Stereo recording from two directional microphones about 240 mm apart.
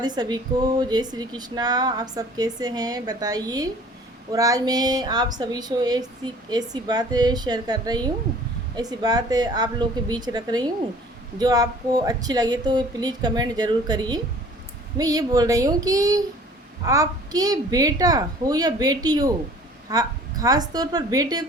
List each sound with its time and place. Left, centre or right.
0.0 s a woman's voice: centre